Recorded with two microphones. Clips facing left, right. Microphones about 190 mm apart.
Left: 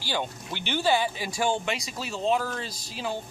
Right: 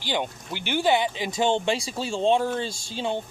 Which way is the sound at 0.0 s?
15° right (ahead or behind).